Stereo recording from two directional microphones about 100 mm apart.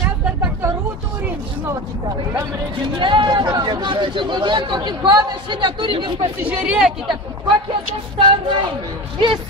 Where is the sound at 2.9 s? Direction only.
55° right (ahead or behind).